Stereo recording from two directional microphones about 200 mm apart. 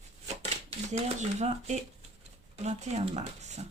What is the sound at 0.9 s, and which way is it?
Speech, 35° right (ahead or behind).